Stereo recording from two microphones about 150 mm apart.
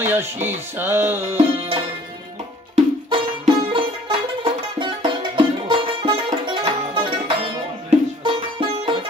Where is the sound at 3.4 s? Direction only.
35° right (ahead or behind).